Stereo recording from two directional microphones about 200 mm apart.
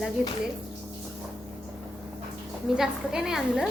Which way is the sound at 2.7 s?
5° right (ahead or behind).